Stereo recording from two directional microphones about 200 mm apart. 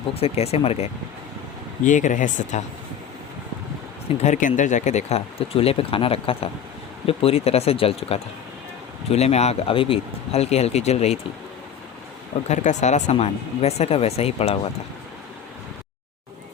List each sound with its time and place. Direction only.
0.1 s speech: 30° left (ahead or behind)
4.2 s speech: 40° left (ahead or behind)
12.5 s speech: 35° left (ahead or behind)